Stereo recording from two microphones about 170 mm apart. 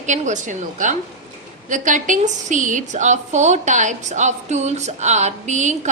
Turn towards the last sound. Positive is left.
turn(degrees=-45)  # may be behind; listen again after turning